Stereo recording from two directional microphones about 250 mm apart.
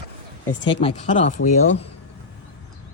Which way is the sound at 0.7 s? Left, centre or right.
Left.